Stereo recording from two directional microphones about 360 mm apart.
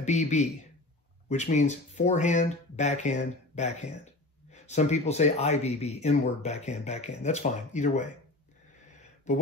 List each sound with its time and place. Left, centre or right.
0.0 s speech: centre
9.3 s speech: centre